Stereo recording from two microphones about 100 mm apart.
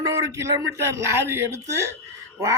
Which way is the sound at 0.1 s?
30° right (ahead or behind).